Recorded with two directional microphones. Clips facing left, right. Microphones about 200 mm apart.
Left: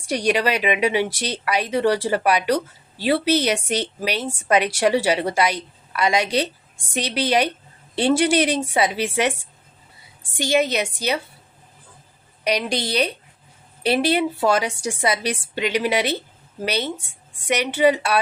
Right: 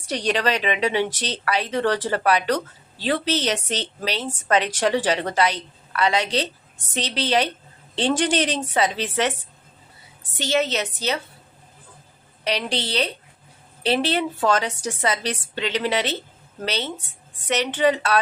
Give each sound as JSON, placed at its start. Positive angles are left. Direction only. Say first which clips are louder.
{"t": 0.1, "sound": "a woman's voice", "louder": "left 2 dB", "side_deg": 10}
{"t": 12.5, "sound": "a woman's voice", "louder": "left 3 dB", "side_deg": 15}